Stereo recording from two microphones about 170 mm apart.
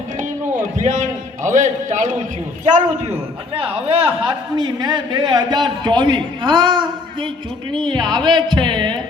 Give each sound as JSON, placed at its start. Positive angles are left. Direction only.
{"t": 0.8, "sound": "a man's voice", "side_deg": -45}